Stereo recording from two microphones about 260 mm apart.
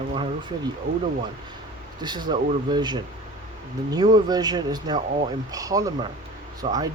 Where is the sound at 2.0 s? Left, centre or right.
Centre.